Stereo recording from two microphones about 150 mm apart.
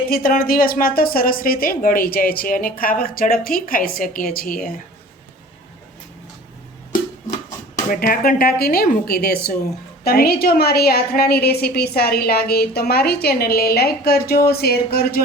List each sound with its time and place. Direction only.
0.1 s a woman's voice: 75° left (ahead or behind)
7.9 s a woman's voice: 75° left (ahead or behind); by 15.2 s 90° left